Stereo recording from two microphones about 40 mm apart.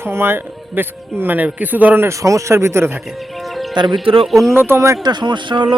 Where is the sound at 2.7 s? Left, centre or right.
Right.